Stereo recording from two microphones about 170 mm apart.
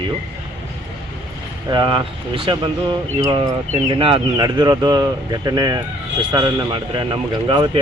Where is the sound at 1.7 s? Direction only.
25° right (ahead or behind).